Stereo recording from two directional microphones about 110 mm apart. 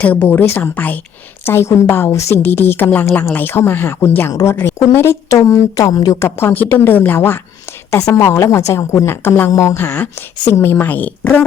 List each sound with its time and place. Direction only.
0.0 s a woman's voice: 15° left (ahead or behind)